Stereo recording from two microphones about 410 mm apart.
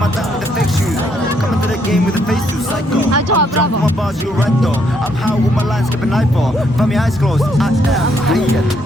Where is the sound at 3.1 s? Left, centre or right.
Right.